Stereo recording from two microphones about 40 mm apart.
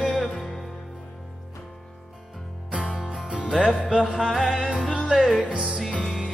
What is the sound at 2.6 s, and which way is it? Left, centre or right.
Music, right.